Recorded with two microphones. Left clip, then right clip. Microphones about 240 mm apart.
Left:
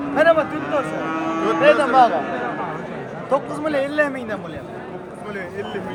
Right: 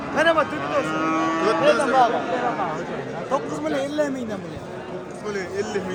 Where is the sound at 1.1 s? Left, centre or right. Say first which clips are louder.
Right 1 dB; right.